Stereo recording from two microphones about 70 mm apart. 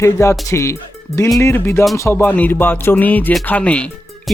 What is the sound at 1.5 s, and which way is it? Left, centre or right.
Music, left.